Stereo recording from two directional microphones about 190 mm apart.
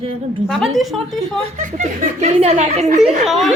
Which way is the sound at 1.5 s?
40° right (ahead or behind).